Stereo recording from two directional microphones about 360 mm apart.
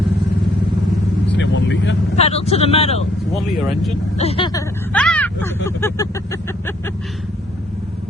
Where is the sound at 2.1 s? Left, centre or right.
Centre.